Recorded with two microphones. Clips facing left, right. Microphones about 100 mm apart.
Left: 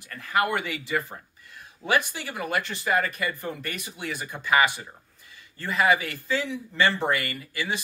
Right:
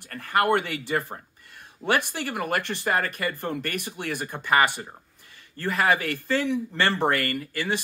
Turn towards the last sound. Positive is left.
turn(degrees=-55)  # may be behind; listen again after turning